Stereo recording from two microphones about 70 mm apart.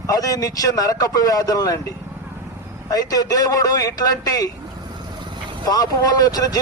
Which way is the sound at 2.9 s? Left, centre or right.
Left.